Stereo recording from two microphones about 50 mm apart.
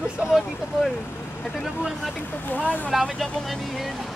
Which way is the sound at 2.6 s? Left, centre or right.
Left.